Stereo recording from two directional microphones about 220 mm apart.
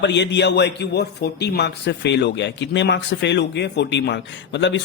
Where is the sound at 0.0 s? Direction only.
50° left (ahead or behind).